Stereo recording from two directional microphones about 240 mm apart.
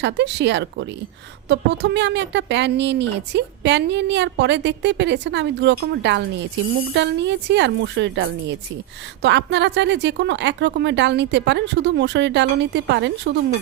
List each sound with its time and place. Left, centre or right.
0.0 s a woman's voice: right